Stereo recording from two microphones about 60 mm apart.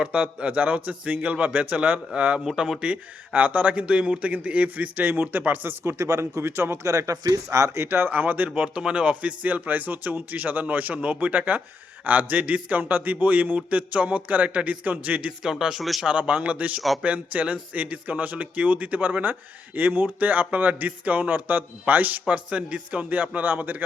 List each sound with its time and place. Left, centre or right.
0.0 s speech: right
2.4 s speech: centre
2.8 s speech: right
5.8 s a man's voice: right
6.4 s a man's voice: right
6.9 s speech: right
7.9 s speech: right
8.4 s speech: centre
15.4 s speech: centre
16.0 s speech: right